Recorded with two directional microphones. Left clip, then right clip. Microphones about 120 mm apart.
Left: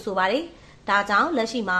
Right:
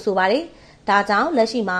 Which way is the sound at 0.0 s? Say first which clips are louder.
Right 5 dB; 50° right (ahead or behind).